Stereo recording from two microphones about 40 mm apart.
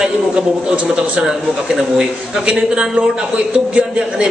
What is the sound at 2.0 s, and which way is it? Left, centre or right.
Speech, right.